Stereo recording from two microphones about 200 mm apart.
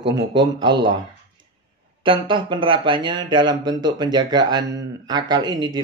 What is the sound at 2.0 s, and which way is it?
Speech, 25° right (ahead or behind).